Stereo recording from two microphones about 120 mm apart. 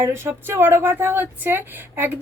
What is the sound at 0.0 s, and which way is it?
Speech, 20° right (ahead or behind).